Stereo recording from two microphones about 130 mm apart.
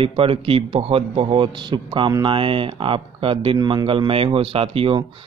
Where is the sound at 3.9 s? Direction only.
45° right (ahead or behind).